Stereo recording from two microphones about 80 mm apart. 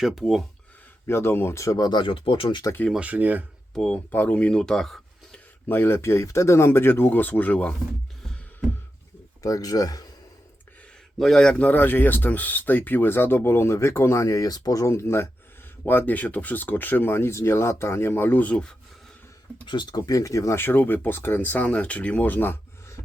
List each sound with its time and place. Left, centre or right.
0.0 s speech: centre
1.0 s speech: left
1.5 s speech: left
1.8 s speech: left
3.0 s speech: centre
3.8 s speech: centre
5.6 s speech: left
9.4 s speech: left
11.2 s speech: centre
19.6 s speech: left
20.0 s speech: left